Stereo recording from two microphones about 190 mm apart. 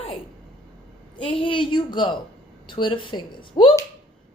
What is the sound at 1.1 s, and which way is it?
Speech, 25° left (ahead or behind).